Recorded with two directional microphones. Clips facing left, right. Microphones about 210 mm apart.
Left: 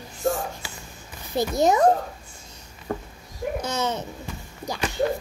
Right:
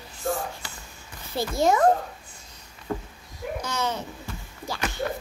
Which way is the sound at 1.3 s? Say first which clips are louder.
Left 2 dB; 20° left (ahead or behind).